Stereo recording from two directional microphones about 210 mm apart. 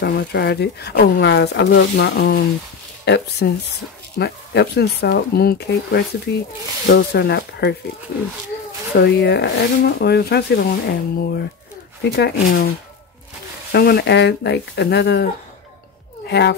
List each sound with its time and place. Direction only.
0.0 s speech: 50° left (ahead or behind)
8.9 s speech: 50° left (ahead or behind)
13.7 s speech: 50° left (ahead or behind)
16.3 s speech: 55° left (ahead or behind)